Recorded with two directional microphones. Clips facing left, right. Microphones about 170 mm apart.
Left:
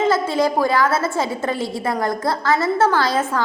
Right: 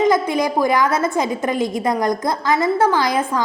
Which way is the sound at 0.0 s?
15° right (ahead or behind).